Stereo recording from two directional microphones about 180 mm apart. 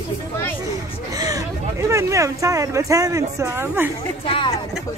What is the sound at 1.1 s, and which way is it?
Speech, 20° right (ahead or behind).